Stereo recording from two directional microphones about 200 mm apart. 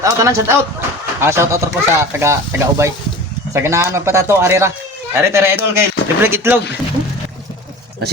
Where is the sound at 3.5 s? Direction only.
15° right (ahead or behind).